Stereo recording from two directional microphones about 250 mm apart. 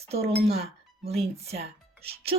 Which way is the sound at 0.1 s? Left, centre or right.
Right.